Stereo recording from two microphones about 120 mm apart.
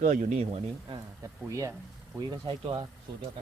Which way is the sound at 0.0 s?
85° right.